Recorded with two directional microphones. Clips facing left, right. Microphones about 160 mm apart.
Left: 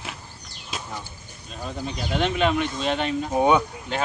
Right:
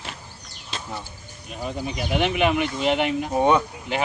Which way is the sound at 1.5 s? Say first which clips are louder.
Right 2 dB; 15° right (ahead or behind).